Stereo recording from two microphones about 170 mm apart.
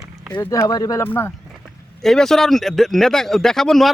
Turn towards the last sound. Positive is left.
turn(degrees=0)  # may be behind; listen again after turning